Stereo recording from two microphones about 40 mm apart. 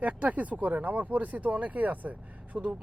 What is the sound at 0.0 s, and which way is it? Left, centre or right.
Speech, right.